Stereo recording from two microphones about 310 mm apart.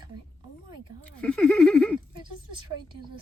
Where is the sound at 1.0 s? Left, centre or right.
Centre.